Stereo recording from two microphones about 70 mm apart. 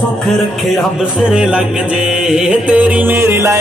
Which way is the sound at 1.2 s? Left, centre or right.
Centre.